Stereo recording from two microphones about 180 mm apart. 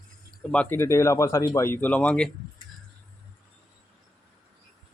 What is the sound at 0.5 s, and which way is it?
Speech, 10° left (ahead or behind).